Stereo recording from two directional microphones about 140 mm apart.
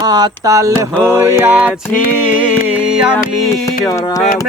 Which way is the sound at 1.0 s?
20° right (ahead or behind).